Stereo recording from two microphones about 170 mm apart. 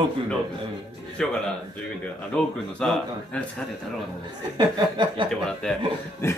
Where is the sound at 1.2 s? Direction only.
5° left (ahead or behind).